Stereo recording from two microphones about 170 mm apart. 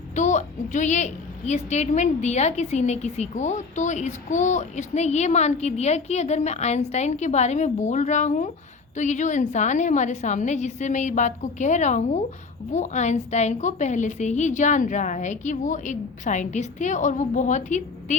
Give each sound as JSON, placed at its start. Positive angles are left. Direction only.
{"t": 0.2, "sound": "a woman's voice", "side_deg": 45}